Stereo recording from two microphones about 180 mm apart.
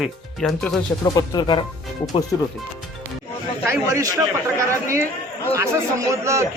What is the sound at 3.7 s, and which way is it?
A man's voice, 15° right (ahead or behind).